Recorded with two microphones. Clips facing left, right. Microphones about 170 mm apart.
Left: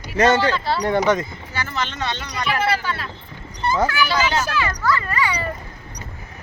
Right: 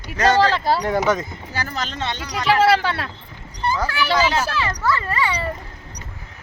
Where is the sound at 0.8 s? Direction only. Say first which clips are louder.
Left 1 dB; 5° right (ahead or behind).